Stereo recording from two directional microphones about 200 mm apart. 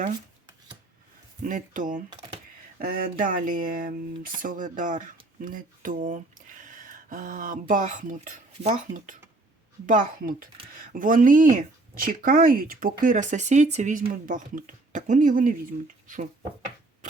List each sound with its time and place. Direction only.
1.5 s speech: 40° right (ahead or behind)